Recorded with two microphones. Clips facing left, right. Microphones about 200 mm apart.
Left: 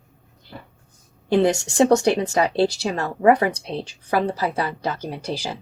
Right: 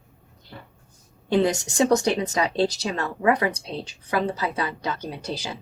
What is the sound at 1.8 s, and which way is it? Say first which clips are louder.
Speech: left 3 dB; 30° left (ahead or behind).